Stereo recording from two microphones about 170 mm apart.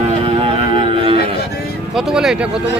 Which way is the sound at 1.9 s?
5° right (ahead or behind).